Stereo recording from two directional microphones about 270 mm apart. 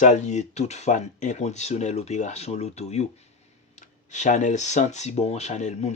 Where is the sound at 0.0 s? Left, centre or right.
Left.